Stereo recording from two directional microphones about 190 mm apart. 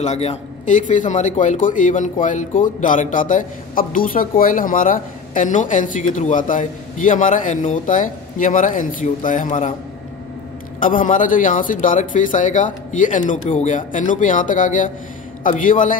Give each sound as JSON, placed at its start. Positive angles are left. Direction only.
{"t": 0.0, "sound": "speech", "side_deg": 35}
{"t": 10.8, "sound": "a man's voice", "side_deg": 45}